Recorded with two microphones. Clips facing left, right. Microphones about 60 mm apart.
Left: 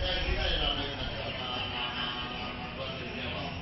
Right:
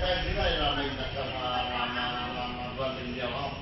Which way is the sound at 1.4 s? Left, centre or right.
Right.